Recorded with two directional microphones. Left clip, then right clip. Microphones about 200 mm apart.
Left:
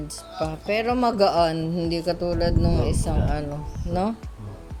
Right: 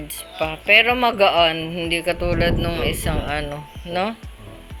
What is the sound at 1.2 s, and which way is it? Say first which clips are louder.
Speech: right 4 dB; 15° left (ahead or behind).